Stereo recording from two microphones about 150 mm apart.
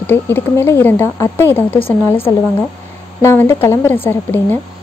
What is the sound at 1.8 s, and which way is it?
Speech, 35° left (ahead or behind).